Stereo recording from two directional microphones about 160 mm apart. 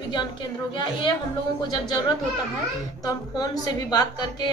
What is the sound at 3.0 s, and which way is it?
A woman's voice, 25° left (ahead or behind).